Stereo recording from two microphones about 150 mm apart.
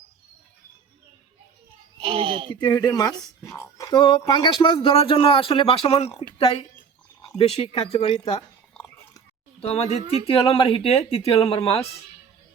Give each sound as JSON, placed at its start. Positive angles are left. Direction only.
{"t": 2.0, "sound": "speech", "side_deg": -40}
{"t": 2.6, "sound": "speech", "side_deg": 25}
{"t": 3.2, "sound": "speech", "side_deg": 0}
{"t": 3.6, "sound": "speech", "side_deg": 25}
{"t": 9.6, "sound": "speech", "side_deg": 40}